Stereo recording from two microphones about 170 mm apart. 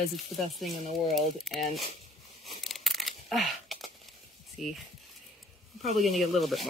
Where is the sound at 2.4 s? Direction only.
Centre (ahead or behind).